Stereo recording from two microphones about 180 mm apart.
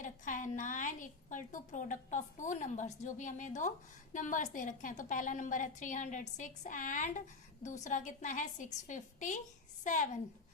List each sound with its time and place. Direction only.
0.0 s a woman's voice: 45° left (ahead or behind)